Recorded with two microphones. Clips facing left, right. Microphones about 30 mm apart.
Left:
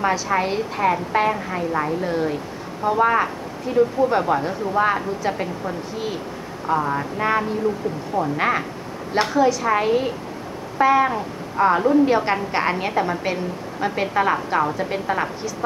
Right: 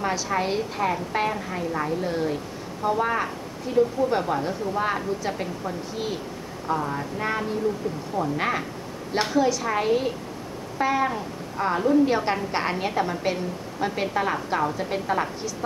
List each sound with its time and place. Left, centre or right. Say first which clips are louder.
0.4 s a woman's voice: left 4 dB; centre
2.0 s a woman's voice: left 3 dB; centre
2.9 s a sound: left 6 dB; centre
3.7 s a woman's voice: left 4 dB; centre
6.7 s a sound: left 5 dB; left
8.4 s a woman's voice: left 5 dB; centre
10.8 s a sound: left 7 dB; centre
11.1 s speech: left 4 dB; left
12.1 s a woman's voice: left 4 dB; centre